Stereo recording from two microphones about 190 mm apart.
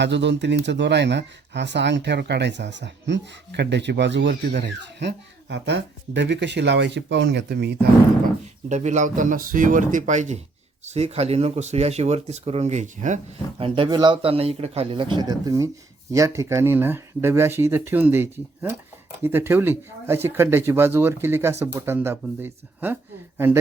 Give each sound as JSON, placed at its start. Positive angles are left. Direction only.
{"t": 0.0, "sound": "speech", "side_deg": -65}
{"t": 8.7, "sound": "speech", "side_deg": -40}
{"t": 13.6, "sound": "a man's voice", "side_deg": -30}